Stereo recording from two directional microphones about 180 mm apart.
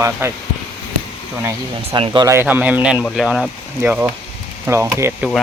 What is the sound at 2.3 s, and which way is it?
Speech, 10° right (ahead or behind).